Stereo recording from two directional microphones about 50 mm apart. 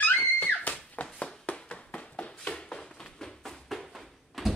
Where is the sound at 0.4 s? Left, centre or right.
Left.